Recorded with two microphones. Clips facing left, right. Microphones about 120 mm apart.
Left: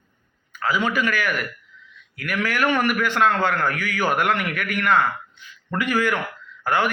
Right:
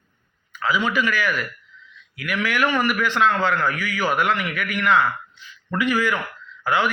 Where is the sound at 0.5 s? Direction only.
45° left (ahead or behind).